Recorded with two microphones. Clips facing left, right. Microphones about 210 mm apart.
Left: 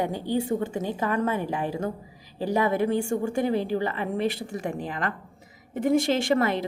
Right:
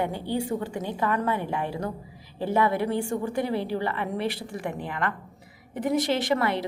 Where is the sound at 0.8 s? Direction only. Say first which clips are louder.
Left 1 dB; 40° left (ahead or behind).